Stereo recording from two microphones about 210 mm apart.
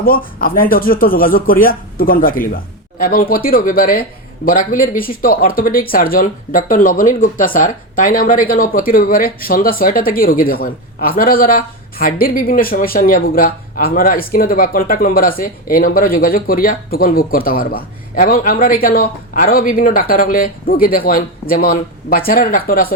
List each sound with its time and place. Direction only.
0.0 s speech: 45° left (ahead or behind)